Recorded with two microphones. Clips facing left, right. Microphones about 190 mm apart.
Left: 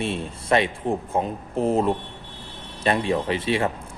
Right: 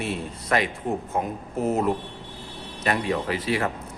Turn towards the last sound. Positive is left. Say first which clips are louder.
# left 2 dB
turn(degrees=25)  # may be behind; listen again after turning